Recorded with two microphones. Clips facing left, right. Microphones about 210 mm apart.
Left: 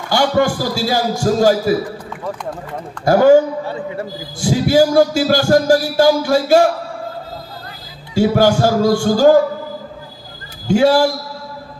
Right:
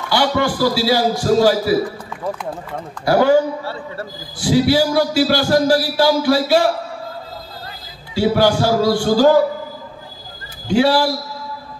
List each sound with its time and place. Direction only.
0.1 s a man's voice: 45° left (ahead or behind)
3.1 s a man's voice: 45° left (ahead or behind)
3.6 s a man's voice: 15° left (ahead or behind)
4.4 s a man's voice: 45° left (ahead or behind)
8.1 s a man's voice: 45° left (ahead or behind)
10.7 s a man's voice: 45° left (ahead or behind)